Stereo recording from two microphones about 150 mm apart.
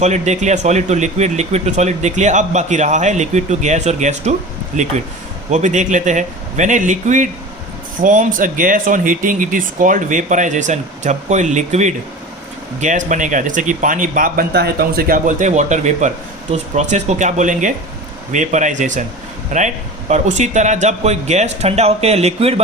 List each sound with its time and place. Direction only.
0.0 s speech: 50° right (ahead or behind)